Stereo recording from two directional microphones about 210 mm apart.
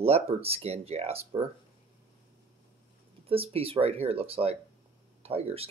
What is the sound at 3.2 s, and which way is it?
Speech, 25° right (ahead or behind).